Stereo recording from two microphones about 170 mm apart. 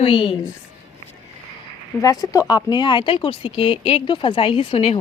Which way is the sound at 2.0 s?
20° left (ahead or behind).